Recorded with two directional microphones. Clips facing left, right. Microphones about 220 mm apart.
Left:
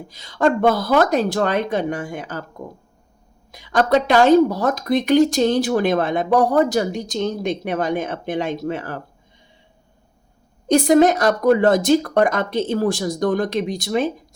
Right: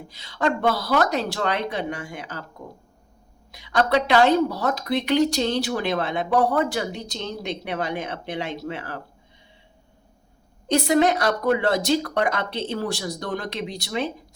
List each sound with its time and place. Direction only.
0.1 s speech: 45° left (ahead or behind)
3.5 s speech: 50° left (ahead or behind)
10.7 s speech: 45° left (ahead or behind)